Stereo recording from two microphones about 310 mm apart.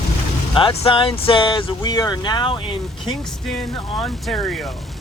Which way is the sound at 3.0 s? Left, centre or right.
Centre.